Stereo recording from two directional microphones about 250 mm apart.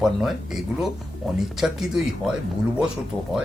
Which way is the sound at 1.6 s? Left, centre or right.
Centre.